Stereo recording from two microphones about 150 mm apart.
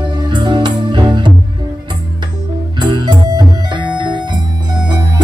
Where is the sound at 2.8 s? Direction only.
25° right (ahead or behind).